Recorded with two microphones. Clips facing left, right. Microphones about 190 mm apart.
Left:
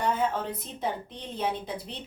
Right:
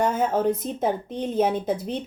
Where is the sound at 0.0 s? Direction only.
45° right (ahead or behind).